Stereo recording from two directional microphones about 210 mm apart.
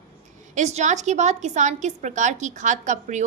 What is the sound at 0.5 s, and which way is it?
A woman's voice, 35° right (ahead or behind).